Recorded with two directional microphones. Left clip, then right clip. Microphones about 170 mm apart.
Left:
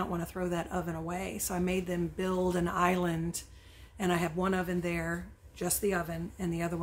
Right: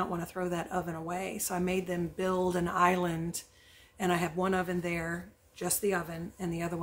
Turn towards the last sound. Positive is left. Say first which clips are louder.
# left 1 dB
turn(degrees=0)  # may be behind; listen again after turning